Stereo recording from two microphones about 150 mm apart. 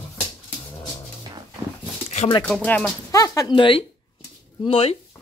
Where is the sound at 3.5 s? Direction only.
35° left (ahead or behind).